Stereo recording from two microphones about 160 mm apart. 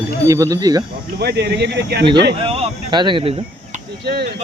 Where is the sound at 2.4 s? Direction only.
35° right (ahead or behind).